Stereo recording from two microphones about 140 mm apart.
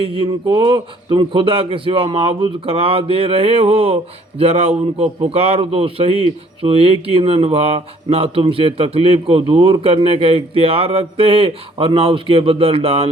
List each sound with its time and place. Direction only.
0.0 s speech: 40° right (ahead or behind)